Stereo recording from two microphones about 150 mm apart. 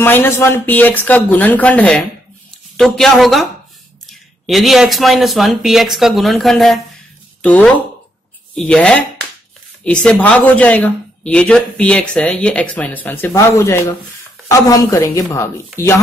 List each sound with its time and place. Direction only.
0.0 s a woman's voice: 15° left (ahead or behind)